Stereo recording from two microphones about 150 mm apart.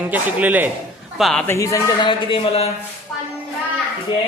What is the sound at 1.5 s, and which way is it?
Speech, 20° left (ahead or behind).